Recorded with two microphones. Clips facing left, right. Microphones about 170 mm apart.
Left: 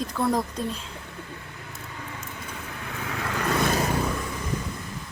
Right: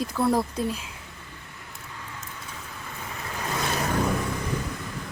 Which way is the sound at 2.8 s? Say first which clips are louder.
Left 6 dB; 85° left.